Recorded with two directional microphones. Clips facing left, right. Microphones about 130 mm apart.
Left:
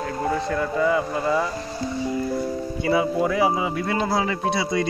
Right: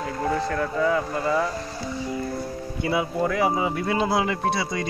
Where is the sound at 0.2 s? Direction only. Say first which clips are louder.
Even; 5° left (ahead or behind).